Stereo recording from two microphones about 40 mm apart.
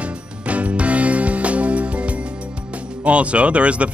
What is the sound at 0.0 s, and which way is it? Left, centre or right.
Music, right.